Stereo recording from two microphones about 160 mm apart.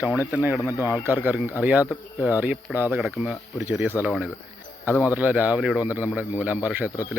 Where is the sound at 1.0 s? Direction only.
10° right (ahead or behind).